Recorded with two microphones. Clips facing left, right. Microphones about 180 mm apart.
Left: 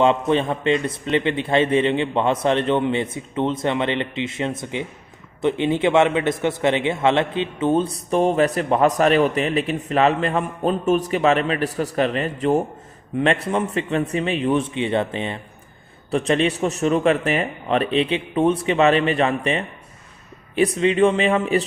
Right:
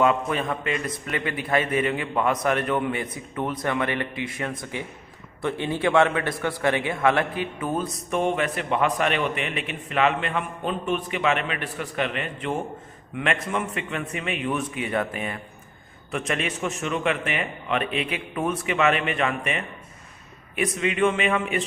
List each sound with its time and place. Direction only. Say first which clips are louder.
0.0 s a man's voice: left 5 dB; 25° left (ahead or behind)